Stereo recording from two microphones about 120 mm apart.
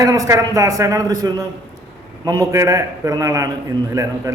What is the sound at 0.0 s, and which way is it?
A man's voice, 25° right (ahead or behind).